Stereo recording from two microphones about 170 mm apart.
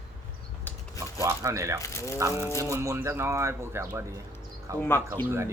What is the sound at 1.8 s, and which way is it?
Speech, 15° left (ahead or behind).